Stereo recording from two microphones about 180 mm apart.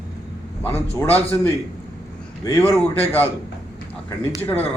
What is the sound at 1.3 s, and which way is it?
A man's voice, 20° left (ahead or behind).